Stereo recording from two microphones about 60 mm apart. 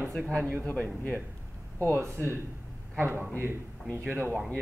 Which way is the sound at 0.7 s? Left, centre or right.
Left.